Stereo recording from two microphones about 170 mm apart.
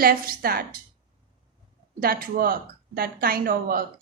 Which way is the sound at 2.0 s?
60° right (ahead or behind).